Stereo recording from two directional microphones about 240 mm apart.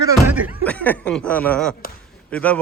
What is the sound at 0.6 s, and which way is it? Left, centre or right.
Speech, centre.